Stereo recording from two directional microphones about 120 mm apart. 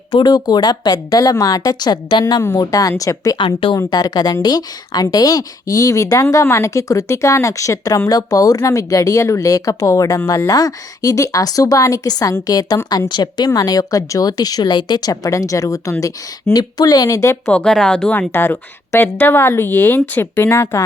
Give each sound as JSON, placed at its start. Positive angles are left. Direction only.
{"t": 0.1, "sound": "speech", "side_deg": 35}
{"t": 3.3, "sound": "speech", "side_deg": 45}
{"t": 17.5, "sound": "a woman's voice", "side_deg": 5}